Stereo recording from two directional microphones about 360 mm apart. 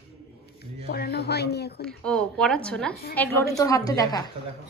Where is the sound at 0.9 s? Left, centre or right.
Left.